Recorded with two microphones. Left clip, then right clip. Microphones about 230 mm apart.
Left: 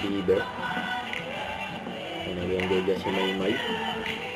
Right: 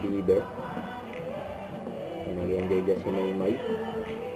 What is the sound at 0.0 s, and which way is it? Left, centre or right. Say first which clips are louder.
Music: even; centre.